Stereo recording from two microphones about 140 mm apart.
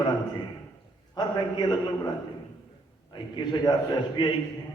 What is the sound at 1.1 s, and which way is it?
Speech, 30° left (ahead or behind).